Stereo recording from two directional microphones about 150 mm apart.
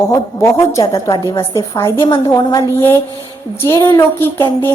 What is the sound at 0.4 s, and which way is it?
A woman's voice, 20° left (ahead or behind).